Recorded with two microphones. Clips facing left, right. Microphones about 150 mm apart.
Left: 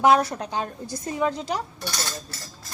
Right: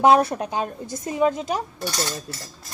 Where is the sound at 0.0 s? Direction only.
25° right (ahead or behind).